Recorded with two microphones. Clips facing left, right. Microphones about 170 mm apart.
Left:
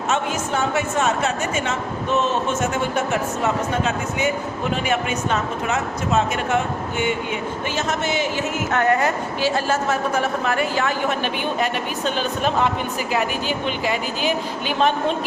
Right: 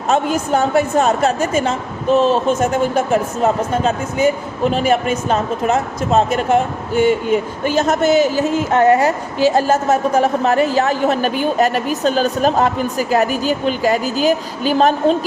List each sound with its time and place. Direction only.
0.1 s speech: 35° right (ahead or behind)
9.6 s speech: 40° right (ahead or behind)